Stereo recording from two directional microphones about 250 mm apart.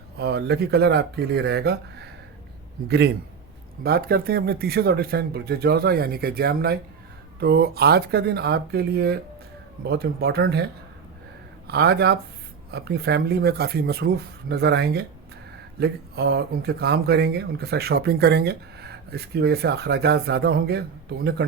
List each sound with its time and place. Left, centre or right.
0.2 s speech: right
2.8 s speech: right
11.7 s speech: right